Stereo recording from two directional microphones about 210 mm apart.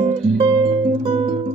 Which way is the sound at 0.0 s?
25° right (ahead or behind).